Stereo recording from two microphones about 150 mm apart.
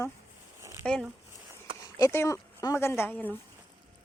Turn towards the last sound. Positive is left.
turn(degrees=10)  # may be behind; listen again after turning